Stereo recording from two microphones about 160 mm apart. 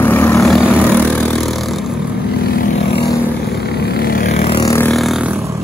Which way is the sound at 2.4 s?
85° left.